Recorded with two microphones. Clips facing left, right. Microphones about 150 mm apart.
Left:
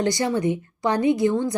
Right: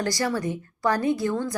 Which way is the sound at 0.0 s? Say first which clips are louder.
Left 4 dB; 20° left (ahead or behind).